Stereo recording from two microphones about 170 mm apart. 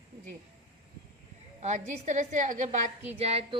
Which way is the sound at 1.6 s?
45° right (ahead or behind).